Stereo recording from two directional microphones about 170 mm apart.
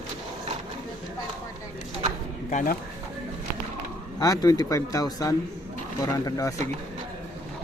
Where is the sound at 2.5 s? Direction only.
50° left (ahead or behind).